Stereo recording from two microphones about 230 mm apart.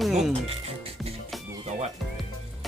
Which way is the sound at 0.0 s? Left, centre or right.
Centre.